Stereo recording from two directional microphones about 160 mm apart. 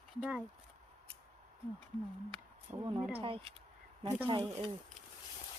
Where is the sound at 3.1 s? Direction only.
35° right (ahead or behind).